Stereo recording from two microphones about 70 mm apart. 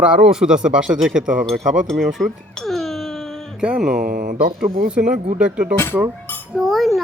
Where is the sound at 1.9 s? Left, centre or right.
Centre.